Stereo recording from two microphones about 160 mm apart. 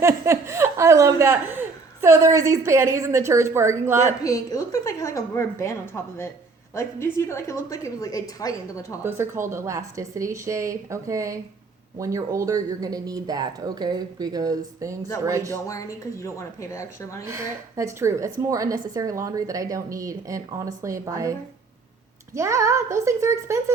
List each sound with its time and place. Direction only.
0.0 s speech: 15° right (ahead or behind)
4.2 s a woman's voice: 20° left (ahead or behind)
9.0 s speech: 15° right (ahead or behind)
15.6 s a woman's voice: 20° left (ahead or behind)
17.2 s speech: 20° right (ahead or behind)
22.4 s speech: 20° right (ahead or behind)